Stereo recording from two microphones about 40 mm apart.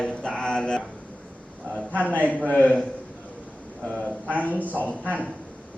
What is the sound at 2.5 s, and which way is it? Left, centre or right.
Speech, left.